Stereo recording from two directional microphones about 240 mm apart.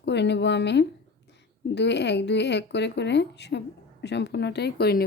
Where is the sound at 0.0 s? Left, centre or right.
Left.